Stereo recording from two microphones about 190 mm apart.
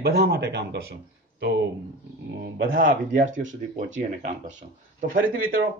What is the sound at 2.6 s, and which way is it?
Speech, 50° right (ahead or behind).